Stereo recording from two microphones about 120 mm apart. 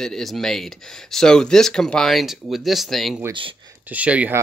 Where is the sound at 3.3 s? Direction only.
45° right (ahead or behind).